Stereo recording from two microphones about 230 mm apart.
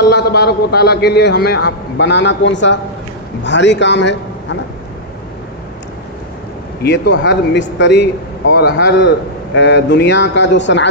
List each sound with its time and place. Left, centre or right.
0.1 s a man's voice: left
6.8 s a man's voice: left